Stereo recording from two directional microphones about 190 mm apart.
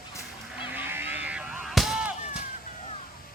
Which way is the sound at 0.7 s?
10° right (ahead or behind).